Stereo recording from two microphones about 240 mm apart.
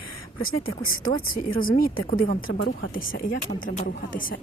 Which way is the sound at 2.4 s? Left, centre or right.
Left.